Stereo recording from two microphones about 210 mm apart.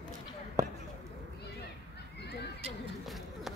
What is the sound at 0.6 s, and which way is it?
Basketball bounce, 15° right (ahead or behind).